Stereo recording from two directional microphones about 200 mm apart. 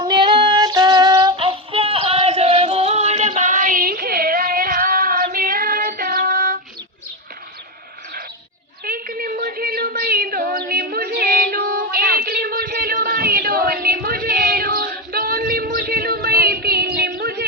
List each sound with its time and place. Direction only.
0.0 s music: 25° right (ahead or behind); by 6.6 s 45° right (ahead or behind)
8.8 s a sound: 45° right (ahead or behind)
11.5 s music: 50° right (ahead or behind)